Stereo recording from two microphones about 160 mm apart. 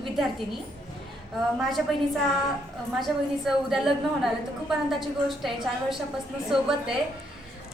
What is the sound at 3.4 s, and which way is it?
Speech, centre (ahead or behind).